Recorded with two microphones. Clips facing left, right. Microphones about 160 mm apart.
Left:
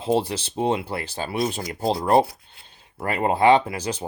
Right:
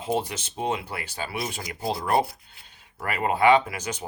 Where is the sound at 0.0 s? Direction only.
30° left (ahead or behind).